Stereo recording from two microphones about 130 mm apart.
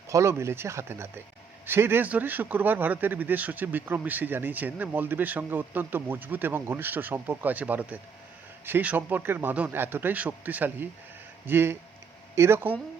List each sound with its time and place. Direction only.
0.1 s speech: 20° right (ahead or behind)